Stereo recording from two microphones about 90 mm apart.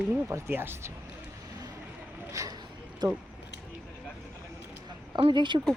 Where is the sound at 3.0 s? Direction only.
50° right (ahead or behind).